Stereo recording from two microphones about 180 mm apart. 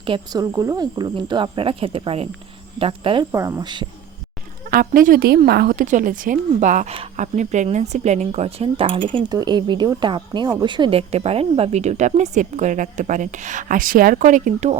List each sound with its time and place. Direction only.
0.0 s speech: 25° right (ahead or behind)
3.3 s speech: 15° right (ahead or behind)
4.7 s a woman's voice: 50° right (ahead or behind)